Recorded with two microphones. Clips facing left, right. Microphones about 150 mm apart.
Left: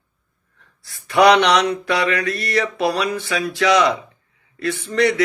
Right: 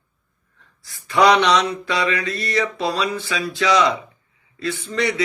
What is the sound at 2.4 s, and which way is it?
A man's voice, 65° left (ahead or behind).